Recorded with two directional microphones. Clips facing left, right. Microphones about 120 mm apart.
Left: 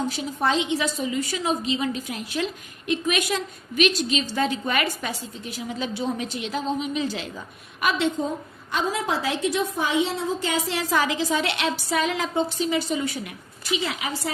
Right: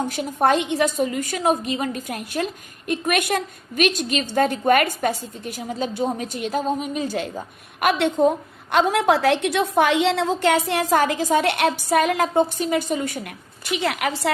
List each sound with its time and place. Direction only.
0.0 s a woman's voice: 55° right (ahead or behind)
13.7 s a woman's voice: 60° right (ahead or behind)